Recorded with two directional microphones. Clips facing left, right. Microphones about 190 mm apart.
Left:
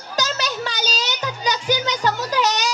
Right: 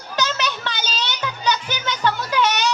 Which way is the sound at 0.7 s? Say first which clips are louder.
Left 2 dB; 40° left (ahead or behind).